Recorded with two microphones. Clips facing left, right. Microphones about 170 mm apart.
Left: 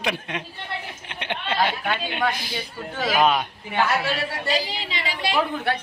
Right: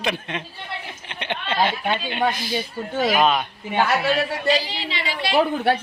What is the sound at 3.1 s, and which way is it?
Speech, 10° left (ahead or behind).